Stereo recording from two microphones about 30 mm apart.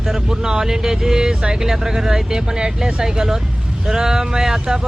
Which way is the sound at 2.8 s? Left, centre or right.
Centre.